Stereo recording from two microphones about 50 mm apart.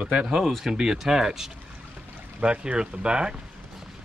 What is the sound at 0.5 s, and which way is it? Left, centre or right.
Speech, centre.